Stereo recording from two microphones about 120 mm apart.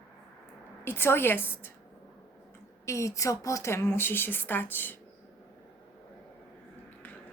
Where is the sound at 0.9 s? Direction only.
20° left (ahead or behind).